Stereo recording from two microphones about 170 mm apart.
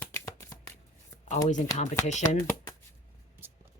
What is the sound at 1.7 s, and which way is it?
Speech, 20° left (ahead or behind).